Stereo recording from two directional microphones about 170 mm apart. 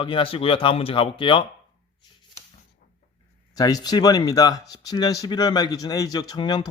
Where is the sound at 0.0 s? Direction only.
30° left (ahead or behind).